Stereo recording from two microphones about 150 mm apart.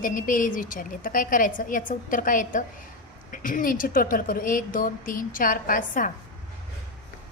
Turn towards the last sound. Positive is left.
turn(degrees=65)  # may be behind; listen again after turning